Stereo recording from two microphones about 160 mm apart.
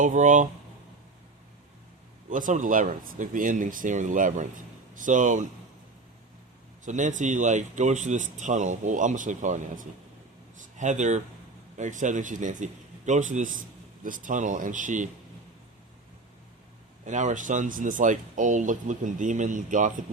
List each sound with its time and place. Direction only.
0.0 s a man's voice: 50° right (ahead or behind)
2.3 s a man's voice: 55° right (ahead or behind)
6.8 s a man's voice: 50° right (ahead or behind)
17.1 s a man's voice: 50° right (ahead or behind)